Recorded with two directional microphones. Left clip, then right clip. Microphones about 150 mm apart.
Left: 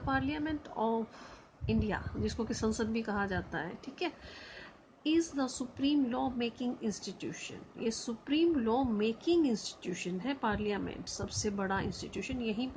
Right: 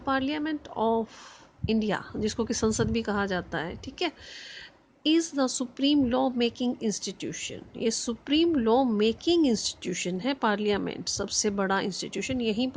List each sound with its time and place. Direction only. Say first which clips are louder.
0.0 s speech: right 6 dB; 60° right (ahead or behind)
1.6 s a woman's voice: right 7 dB; 70° right (ahead or behind)